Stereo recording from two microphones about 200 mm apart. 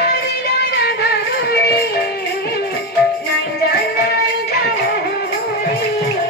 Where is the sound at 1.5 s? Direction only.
55° left (ahead or behind).